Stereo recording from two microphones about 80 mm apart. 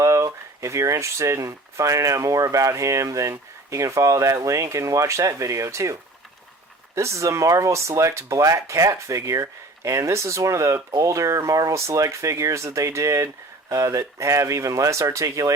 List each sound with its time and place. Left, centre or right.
0.0 s speech: right